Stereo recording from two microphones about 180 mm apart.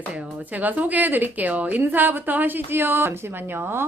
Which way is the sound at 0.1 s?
10° right (ahead or behind).